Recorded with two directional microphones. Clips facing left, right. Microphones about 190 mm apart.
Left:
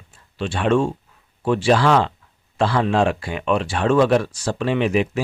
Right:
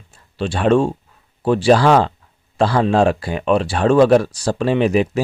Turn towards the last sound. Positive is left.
turn(degrees=-40)  # may be behind; listen again after turning